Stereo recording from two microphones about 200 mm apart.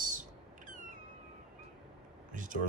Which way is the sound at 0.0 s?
40° right (ahead or behind).